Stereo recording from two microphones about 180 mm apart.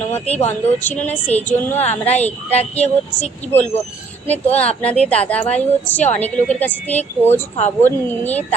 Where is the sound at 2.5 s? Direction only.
35° left (ahead or behind).